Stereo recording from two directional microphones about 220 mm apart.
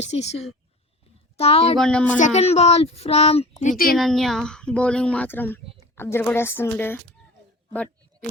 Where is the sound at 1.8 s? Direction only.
5° left (ahead or behind).